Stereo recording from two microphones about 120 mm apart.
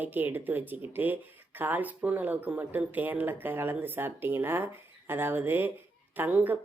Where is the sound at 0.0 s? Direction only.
15° right (ahead or behind).